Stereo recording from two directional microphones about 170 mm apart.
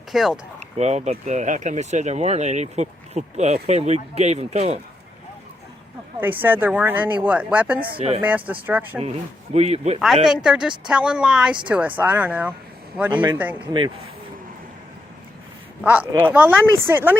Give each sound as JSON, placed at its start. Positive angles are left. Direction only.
{"t": 0.1, "sound": "speech", "side_deg": 0}
{"t": 0.8, "sound": "speech", "side_deg": -40}
{"t": 6.1, "sound": "speech", "side_deg": -10}
{"t": 7.9, "sound": "speech", "side_deg": -35}
{"t": 8.4, "sound": "speech", "side_deg": -10}
{"t": 9.0, "sound": "speech", "side_deg": -40}
{"t": 10.2, "sound": "speech", "side_deg": -5}
{"t": 15.8, "sound": "speech", "side_deg": -10}